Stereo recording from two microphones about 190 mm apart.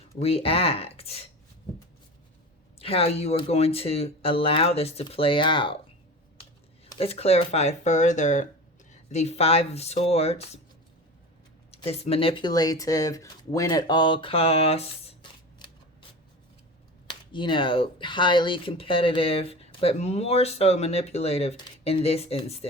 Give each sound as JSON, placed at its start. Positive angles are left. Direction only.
{"t": 0.2, "sound": "speech", "side_deg": 30}
{"t": 2.7, "sound": "speech", "side_deg": 30}
{"t": 6.9, "sound": "speech", "side_deg": 30}
{"t": 11.7, "sound": "speech", "side_deg": 30}
{"t": 17.1, "sound": "speech", "side_deg": 25}